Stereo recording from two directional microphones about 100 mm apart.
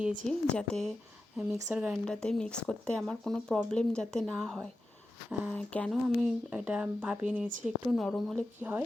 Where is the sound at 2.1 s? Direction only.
10° left (ahead or behind).